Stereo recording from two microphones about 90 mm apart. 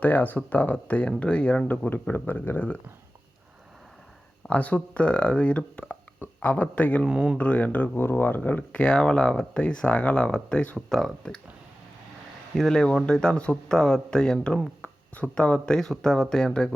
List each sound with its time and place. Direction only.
0.0 s speech: 20° left (ahead or behind)
4.4 s speech: 15° left (ahead or behind)
7.0 s speech: 10° right (ahead or behind)
7.3 s speech: 15° left (ahead or behind)
12.5 s speech: 5° left (ahead or behind)